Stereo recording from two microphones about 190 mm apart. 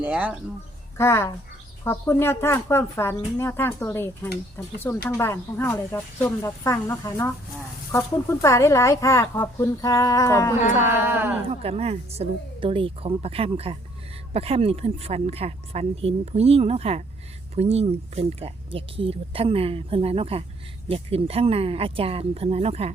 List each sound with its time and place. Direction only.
0.0 s a woman's voice: 5° right (ahead or behind)
0.9 s speech: 15° left (ahead or behind)
10.8 s a woman's voice: 10° right (ahead or behind)
11.4 s speech: 35° right (ahead or behind)